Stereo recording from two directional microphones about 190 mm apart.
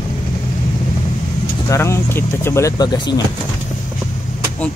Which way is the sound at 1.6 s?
15° left (ahead or behind).